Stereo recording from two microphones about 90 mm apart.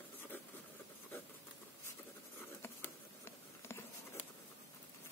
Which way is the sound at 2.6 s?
30° left (ahead or behind).